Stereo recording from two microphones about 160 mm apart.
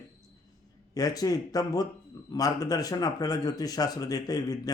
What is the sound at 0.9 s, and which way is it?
Speech, 25° left (ahead or behind).